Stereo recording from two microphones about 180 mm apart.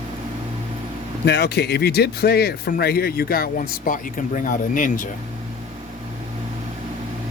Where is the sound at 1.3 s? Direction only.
65° left (ahead or behind); by 5.0 s 50° left (ahead or behind).